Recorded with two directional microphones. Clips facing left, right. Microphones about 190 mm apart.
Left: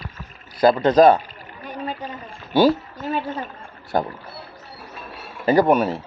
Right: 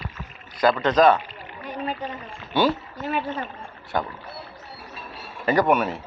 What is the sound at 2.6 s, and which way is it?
A woman's voice, 35° left (ahead or behind).